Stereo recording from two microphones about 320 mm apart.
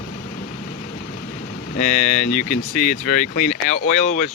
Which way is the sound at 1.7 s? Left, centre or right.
Left.